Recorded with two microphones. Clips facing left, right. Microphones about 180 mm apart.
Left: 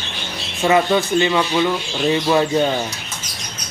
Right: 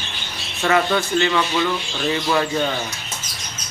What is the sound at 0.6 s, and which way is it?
Speech, 20° left (ahead or behind).